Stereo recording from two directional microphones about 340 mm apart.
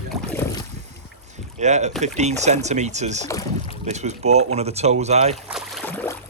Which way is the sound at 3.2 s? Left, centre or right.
Centre.